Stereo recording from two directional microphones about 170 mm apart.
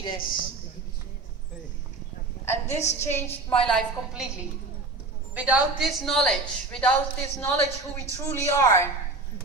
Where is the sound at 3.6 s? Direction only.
5° left (ahead or behind).